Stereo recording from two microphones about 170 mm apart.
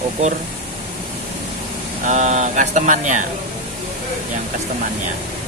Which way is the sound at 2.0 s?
45° right (ahead or behind).